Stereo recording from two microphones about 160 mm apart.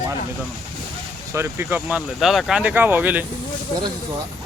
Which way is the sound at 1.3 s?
15° right (ahead or behind).